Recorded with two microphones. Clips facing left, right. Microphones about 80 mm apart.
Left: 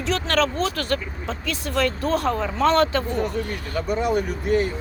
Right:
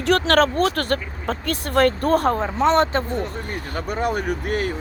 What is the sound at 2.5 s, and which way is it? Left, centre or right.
Speech, right.